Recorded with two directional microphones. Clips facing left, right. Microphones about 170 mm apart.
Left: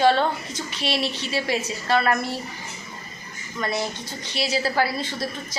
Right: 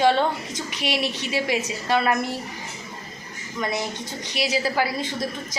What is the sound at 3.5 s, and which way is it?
A woman's voice, 15° right (ahead or behind).